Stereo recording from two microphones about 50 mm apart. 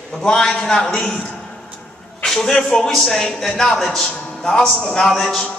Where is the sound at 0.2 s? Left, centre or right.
Centre.